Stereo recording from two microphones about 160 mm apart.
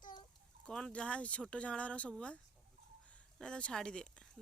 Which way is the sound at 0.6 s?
5° left (ahead or behind).